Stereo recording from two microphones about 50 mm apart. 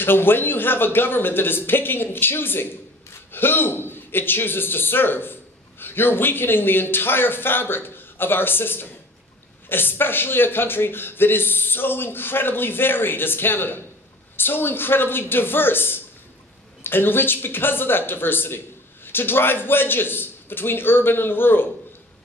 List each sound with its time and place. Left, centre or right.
0.0 s speech: left